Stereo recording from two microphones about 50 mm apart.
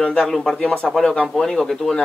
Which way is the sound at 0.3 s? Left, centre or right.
Centre.